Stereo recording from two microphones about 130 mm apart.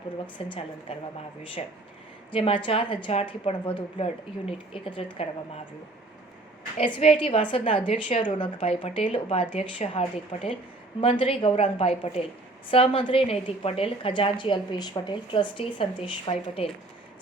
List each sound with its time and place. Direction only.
0.4 s a woman's voice: 45° left (ahead or behind)
2.3 s a woman's voice: 45° left (ahead or behind)
6.7 s a woman's voice: 45° left (ahead or behind)